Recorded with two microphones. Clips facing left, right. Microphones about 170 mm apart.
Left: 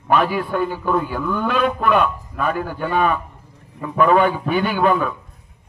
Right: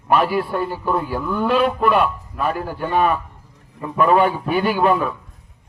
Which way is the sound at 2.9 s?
35° right (ahead or behind).